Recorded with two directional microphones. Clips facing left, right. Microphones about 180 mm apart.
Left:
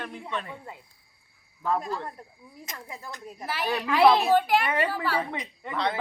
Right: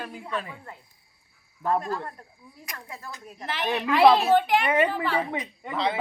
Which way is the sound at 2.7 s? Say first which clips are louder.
Even; 15° left (ahead or behind).